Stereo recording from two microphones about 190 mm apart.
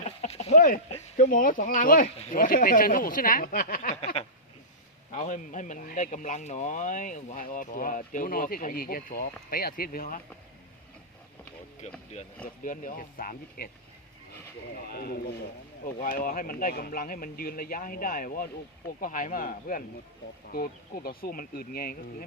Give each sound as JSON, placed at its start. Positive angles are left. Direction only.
{"t": 0.0, "sound": "a sound", "side_deg": 35}
{"t": 0.9, "sound": "a man's voice", "side_deg": 35}
{"t": 4.0, "sound": "a sound", "side_deg": 30}
{"t": 5.1, "sound": "a man's voice", "side_deg": 45}
{"t": 12.1, "sound": "speech", "side_deg": 35}
{"t": 12.6, "sound": "a man's voice", "side_deg": 45}
{"t": 14.8, "sound": "a man's voice", "side_deg": 55}